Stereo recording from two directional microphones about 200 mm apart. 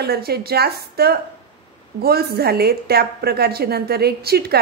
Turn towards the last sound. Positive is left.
turn(degrees=-50)  # may be behind; listen again after turning